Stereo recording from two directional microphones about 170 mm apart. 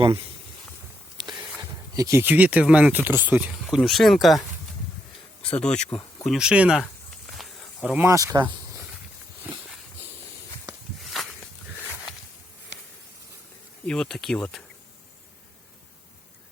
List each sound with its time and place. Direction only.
0.0 s speech: 30° right (ahead or behind)
2.0 s speech: 15° right (ahead or behind); by 4.4 s centre (ahead or behind)
5.5 s speech: 5° left (ahead or behind)
7.3 s snake: centre (ahead or behind)
8.0 s speech: 20° right (ahead or behind)
9.4 s a sound: 10° right (ahead or behind)
11.0 s walk: centre (ahead or behind)
13.8 s speech: 5° left (ahead or behind)